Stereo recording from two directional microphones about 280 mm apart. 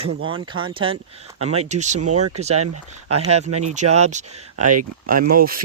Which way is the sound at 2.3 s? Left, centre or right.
Right.